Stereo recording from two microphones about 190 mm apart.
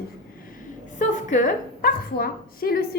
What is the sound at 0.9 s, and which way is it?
A woman's voice, 40° left (ahead or behind).